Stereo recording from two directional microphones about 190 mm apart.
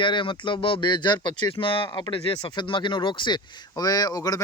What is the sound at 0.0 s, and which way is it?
Speech, 25° left (ahead or behind).